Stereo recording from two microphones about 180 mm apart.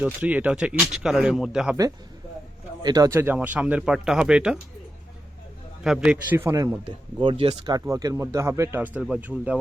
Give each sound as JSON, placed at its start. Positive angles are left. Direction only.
{"t": 0.0, "sound": "speech", "side_deg": -10}
{"t": 2.8, "sound": "speech", "side_deg": -20}
{"t": 5.8, "sound": "speech", "side_deg": -5}
{"t": 7.2, "sound": "speech", "side_deg": -30}